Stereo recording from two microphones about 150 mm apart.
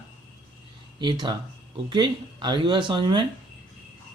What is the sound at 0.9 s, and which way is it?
Speech, 30° right (ahead or behind).